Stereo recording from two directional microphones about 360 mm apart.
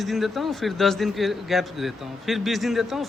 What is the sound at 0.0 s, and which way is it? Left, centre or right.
Speech, centre.